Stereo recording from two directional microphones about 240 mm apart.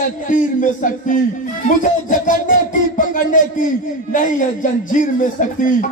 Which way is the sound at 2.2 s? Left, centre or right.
Left.